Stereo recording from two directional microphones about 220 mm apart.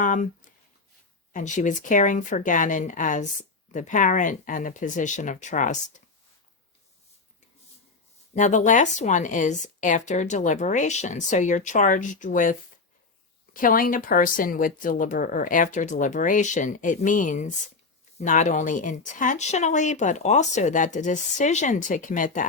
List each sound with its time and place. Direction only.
0.0 s speech: 35° left (ahead or behind)
1.3 s speech: 35° left (ahead or behind)
8.4 s speech: 35° left (ahead or behind)